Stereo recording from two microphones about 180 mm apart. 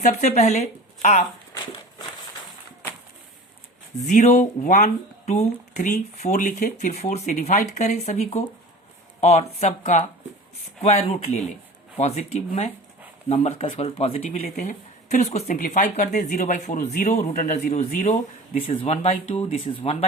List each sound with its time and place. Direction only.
0.0 s speech: 40° left (ahead or behind)
4.0 s speech: 40° left (ahead or behind)